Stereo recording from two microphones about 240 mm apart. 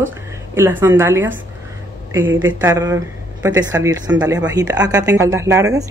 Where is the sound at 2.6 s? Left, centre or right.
Centre.